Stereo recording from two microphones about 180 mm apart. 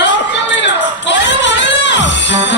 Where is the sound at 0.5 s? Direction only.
85° left.